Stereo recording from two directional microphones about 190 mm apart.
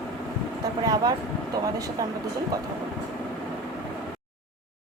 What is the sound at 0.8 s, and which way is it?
Speech, 20° right (ahead or behind).